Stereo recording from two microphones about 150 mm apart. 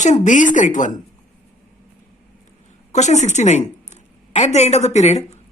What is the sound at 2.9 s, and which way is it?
Speech, 50° left (ahead or behind).